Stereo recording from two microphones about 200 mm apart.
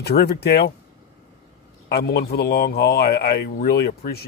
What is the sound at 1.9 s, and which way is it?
Speech, 50° left (ahead or behind).